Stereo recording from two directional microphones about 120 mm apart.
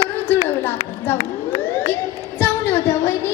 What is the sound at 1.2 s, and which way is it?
Siren, 50° left (ahead or behind).